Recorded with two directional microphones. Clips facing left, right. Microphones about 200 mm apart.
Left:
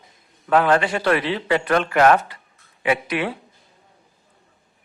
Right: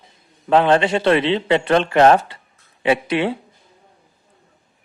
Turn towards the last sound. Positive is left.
turn(degrees=-25)  # may be behind; listen again after turning